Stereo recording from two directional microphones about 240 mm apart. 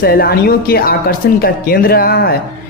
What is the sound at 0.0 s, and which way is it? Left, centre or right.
Speech, left.